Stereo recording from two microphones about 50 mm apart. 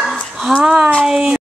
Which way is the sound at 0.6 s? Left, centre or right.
Centre.